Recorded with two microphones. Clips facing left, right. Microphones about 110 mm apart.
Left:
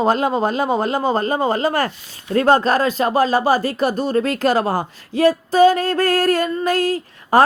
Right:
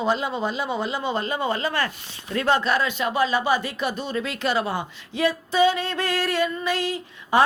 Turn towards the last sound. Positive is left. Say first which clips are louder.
# left 5 dB
turn(degrees=45)  # may be behind; listen again after turning